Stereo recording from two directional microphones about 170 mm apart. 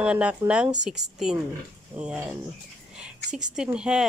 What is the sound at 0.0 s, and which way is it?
Speech, 5° right (ahead or behind).